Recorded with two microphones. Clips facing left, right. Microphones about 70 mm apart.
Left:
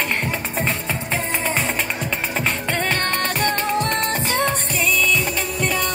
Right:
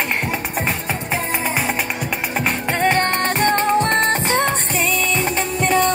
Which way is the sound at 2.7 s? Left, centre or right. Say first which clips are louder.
Right 4 dB; right.